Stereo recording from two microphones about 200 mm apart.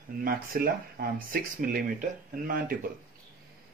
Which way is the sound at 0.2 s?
45° right (ahead or behind).